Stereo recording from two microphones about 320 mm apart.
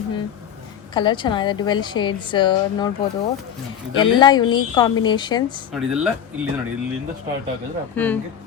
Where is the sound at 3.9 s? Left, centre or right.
Centre.